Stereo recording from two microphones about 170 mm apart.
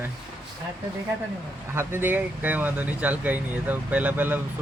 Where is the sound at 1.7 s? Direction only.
15° right (ahead or behind).